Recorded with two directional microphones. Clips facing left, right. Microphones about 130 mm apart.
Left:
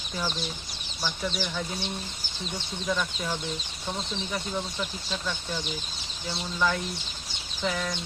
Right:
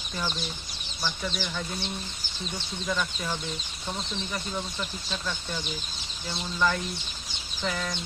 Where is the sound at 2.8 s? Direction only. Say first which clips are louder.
Left 1 dB; 5° left (ahead or behind).